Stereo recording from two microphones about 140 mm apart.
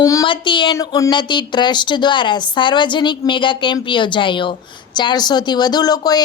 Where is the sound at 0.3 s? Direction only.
35° left (ahead or behind).